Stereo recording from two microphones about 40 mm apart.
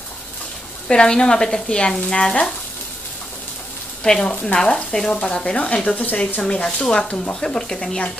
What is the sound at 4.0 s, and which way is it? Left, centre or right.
Speech, left.